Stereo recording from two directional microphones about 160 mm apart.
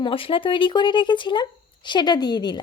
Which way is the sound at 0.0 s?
35° left (ahead or behind).